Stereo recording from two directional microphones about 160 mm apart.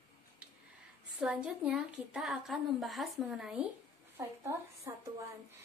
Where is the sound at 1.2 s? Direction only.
5° right (ahead or behind).